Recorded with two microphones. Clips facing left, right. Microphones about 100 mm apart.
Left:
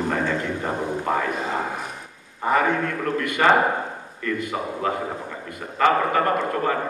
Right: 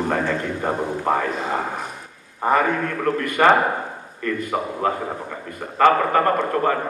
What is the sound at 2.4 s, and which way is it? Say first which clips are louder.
A man's voice: right 1 dB; 40° right (ahead or behind).